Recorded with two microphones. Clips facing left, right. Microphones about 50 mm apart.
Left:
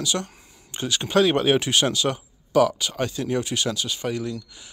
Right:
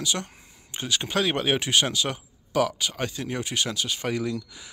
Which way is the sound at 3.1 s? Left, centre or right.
Right.